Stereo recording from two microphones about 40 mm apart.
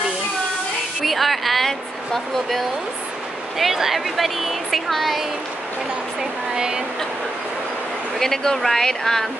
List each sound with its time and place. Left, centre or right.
1.0 s speech: centre
3.5 s speech: centre
6.5 s speech: centre
8.2 s speech: centre